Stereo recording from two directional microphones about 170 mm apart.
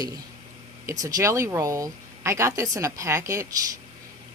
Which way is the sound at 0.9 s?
20° right (ahead or behind).